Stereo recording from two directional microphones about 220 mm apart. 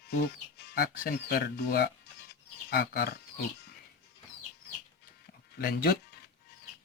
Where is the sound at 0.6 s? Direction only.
45° left (ahead or behind).